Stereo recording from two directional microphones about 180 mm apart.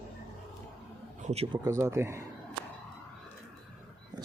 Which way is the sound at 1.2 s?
35° right (ahead or behind).